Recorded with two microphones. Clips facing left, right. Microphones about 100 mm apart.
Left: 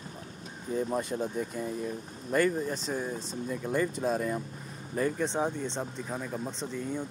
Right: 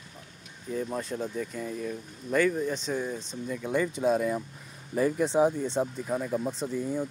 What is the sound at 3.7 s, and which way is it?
A man's voice, centre (ahead or behind).